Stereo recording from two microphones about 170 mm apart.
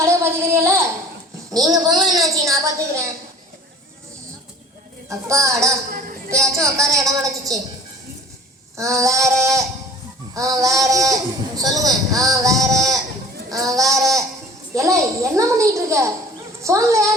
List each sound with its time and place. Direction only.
0.0 s a sound: 15° right (ahead or behind)
1.6 s speech: 20° right (ahead or behind)
5.0 s a child's voice: 20° right (ahead or behind)
5.9 s a sound: 55° right (ahead or behind)
6.4 s speech: 20° right (ahead or behind)
8.7 s a child's voice: 20° right (ahead or behind)